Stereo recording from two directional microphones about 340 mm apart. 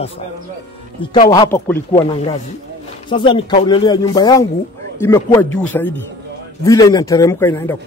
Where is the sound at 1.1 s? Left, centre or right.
Centre.